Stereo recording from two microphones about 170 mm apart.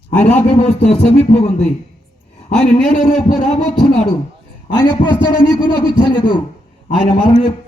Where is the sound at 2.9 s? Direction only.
45° left (ahead or behind).